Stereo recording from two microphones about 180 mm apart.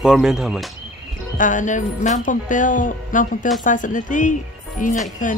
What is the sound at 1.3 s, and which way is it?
Speech, 45° left (ahead or behind).